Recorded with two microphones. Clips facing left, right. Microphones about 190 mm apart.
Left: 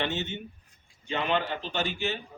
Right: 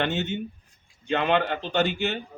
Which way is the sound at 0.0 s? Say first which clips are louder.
Right 5 dB; 55° right (ahead or behind).